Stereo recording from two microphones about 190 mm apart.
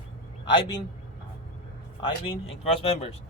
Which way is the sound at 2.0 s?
30° left (ahead or behind).